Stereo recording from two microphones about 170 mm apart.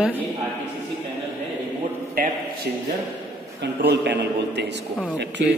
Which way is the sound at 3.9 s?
85° right.